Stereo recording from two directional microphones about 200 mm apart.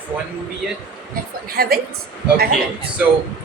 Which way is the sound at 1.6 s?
50° right (ahead or behind).